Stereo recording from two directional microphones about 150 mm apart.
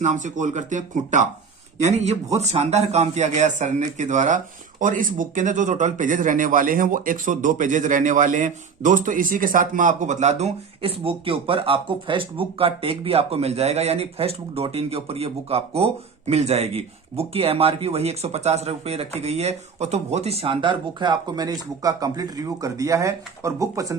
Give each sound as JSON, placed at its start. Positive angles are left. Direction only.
{"t": 0.0, "sound": "speech", "side_deg": -55}